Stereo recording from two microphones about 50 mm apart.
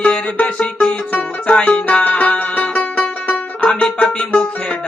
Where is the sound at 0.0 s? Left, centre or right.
Left.